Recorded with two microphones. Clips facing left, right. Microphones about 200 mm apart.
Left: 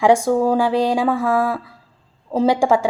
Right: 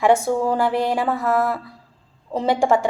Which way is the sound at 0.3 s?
40° left (ahead or behind).